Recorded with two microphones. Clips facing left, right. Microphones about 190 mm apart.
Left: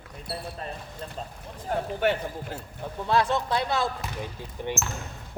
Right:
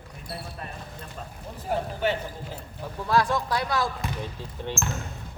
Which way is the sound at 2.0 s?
60° left (ahead or behind).